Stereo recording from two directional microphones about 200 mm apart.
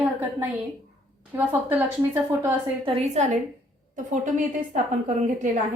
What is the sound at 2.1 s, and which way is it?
Speech, 10° right (ahead or behind).